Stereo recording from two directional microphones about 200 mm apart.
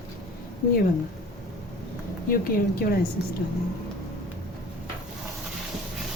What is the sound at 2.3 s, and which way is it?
Speech, 45° left (ahead or behind).